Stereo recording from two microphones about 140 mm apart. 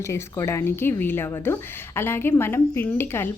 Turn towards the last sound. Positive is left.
turn(degrees=15)  # may be behind; listen again after turning